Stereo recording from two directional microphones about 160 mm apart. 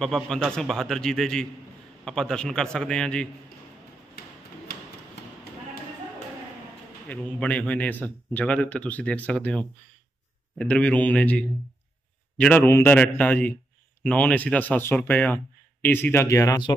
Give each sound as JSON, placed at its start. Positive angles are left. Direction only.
{"t": 0.0, "sound": "a man's voice", "side_deg": 5}
{"t": 7.1, "sound": "a man's voice", "side_deg": 10}